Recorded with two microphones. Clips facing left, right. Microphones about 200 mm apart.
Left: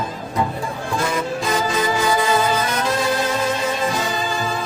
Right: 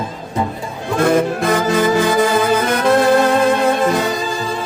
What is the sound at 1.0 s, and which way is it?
Music, 60° right (ahead or behind).